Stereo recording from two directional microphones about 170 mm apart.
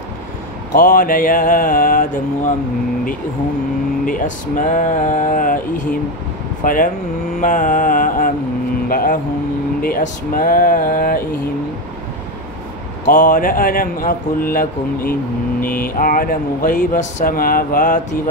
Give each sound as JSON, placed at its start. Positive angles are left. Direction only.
{"t": 0.7, "sound": "speech", "side_deg": 55}
{"t": 4.0, "sound": "speech", "side_deg": 50}
{"t": 8.8, "sound": "mantra", "side_deg": 55}
{"t": 9.8, "sound": "speech", "side_deg": 60}
{"t": 13.0, "sound": "speech", "side_deg": 55}